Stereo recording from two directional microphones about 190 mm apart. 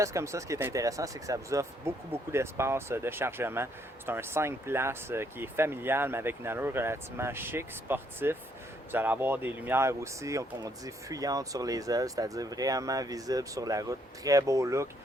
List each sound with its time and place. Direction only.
0.0 s speech: 15° right (ahead or behind)